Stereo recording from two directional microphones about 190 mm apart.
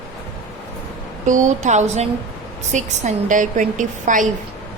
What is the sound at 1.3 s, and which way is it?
A woman's voice, 40° right (ahead or behind).